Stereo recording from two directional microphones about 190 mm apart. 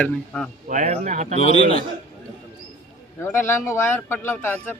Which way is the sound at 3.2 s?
15° left (ahead or behind).